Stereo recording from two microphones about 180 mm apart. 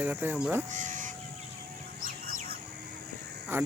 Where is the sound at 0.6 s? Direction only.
45° right (ahead or behind).